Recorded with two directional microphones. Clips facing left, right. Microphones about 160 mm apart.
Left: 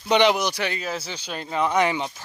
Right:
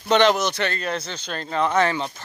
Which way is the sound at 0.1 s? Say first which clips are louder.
Right 1 dB; 15° left (ahead or behind).